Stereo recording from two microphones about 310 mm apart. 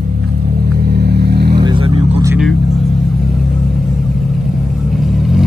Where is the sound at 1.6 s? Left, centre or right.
Centre.